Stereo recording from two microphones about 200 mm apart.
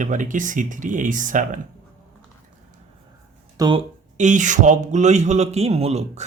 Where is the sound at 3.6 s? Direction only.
25° right (ahead or behind).